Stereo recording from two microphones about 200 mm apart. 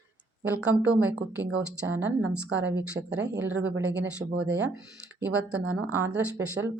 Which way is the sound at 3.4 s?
10° right (ahead or behind).